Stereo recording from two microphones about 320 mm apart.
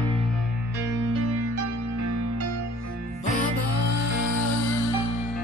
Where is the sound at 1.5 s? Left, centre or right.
Right.